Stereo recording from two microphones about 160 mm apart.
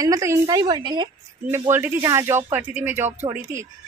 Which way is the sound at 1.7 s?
15° right (ahead or behind).